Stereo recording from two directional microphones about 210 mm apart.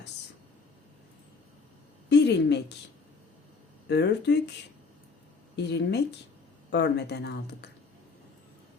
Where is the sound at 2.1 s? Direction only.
55° left (ahead or behind).